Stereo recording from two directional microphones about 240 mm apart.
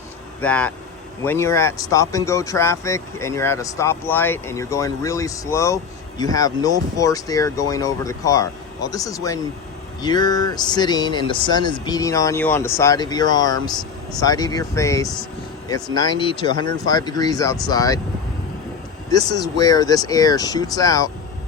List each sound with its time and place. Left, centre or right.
0.4 s speech: centre
19.1 s speech: centre